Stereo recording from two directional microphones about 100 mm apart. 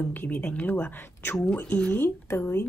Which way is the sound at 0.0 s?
20° left (ahead or behind).